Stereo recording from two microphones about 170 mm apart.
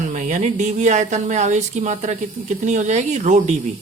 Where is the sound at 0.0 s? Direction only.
45° right (ahead or behind).